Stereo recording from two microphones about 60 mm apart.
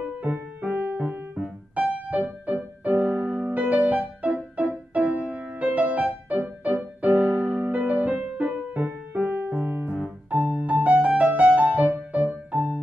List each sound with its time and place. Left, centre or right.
0.2 s music: right